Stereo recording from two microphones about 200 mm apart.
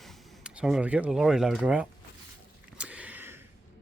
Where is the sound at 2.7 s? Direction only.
5° right (ahead or behind).